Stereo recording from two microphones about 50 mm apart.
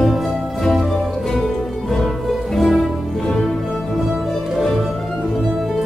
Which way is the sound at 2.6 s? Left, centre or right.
Centre.